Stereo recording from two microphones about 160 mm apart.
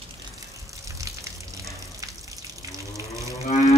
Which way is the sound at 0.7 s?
20° right (ahead or behind).